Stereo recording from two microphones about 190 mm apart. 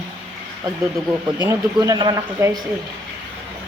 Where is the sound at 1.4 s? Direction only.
20° right (ahead or behind).